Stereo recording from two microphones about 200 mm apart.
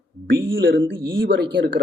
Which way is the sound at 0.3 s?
70° right (ahead or behind).